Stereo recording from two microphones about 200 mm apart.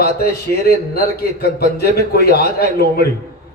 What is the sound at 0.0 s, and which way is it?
A man's voice, 50° left (ahead or behind).